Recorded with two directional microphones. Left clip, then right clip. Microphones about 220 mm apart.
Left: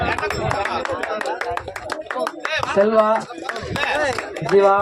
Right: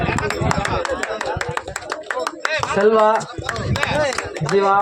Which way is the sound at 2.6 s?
50° right (ahead or behind).